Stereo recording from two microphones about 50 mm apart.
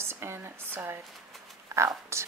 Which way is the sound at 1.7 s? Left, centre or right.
Right.